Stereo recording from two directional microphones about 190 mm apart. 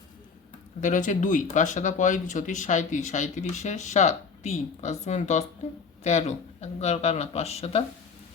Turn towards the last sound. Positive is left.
turn(degrees=30)  # may be behind; listen again after turning